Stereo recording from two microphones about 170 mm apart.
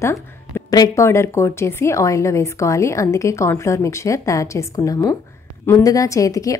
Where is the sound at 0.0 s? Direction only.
15° left (ahead or behind).